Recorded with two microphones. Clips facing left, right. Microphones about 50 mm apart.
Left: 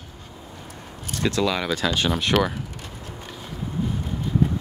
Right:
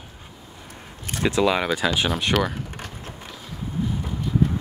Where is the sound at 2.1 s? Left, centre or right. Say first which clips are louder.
Left 1 dB; centre.